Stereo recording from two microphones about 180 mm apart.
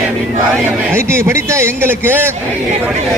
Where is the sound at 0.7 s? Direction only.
15° right (ahead or behind).